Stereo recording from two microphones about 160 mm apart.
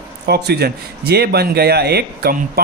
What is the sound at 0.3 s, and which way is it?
Speech, 90° right.